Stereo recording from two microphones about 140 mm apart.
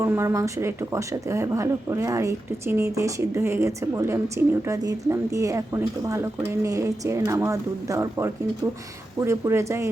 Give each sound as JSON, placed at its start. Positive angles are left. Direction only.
{"t": 0.0, "sound": "speech", "side_deg": -20}